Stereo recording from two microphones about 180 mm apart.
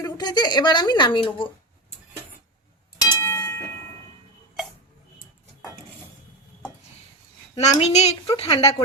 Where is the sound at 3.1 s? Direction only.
15° left (ahead or behind).